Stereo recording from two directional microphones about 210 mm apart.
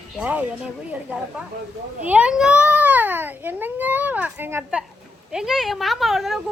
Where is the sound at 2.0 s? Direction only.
5° right (ahead or behind).